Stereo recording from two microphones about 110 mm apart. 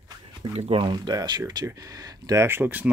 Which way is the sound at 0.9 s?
40° right (ahead or behind).